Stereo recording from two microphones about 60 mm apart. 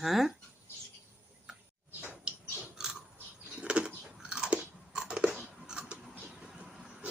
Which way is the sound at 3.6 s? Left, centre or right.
Centre.